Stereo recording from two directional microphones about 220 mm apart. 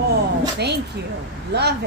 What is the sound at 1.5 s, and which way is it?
Speech, 50° right (ahead or behind).